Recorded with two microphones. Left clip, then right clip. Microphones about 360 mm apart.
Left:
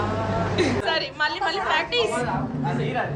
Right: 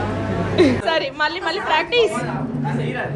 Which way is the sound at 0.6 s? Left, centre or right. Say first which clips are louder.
Right 8 dB; centre.